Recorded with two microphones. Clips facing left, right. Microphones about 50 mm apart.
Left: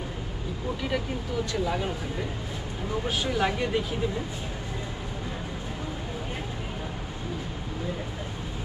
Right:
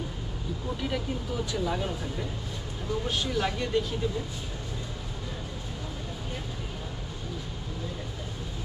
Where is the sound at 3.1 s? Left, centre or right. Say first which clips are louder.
Left 4 dB; centre.